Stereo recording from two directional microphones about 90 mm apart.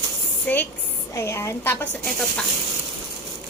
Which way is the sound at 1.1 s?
35° left (ahead or behind).